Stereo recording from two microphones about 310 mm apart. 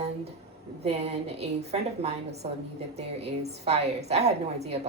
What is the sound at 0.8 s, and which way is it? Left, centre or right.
A woman's voice, right.